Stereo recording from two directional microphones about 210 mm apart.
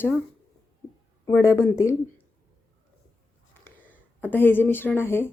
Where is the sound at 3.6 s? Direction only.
10° left (ahead or behind).